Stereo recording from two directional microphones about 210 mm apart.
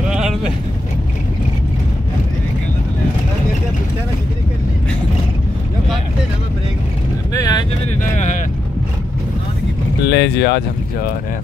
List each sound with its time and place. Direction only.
0.1 s vehicle: centre (ahead or behind)
7.3 s vehicle: 20° left (ahead or behind)
8.0 s a sound: 35° left (ahead or behind)
10.0 s speech: 55° left (ahead or behind)